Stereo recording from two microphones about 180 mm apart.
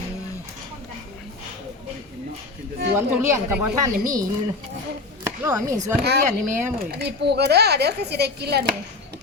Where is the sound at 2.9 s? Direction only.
10° right (ahead or behind).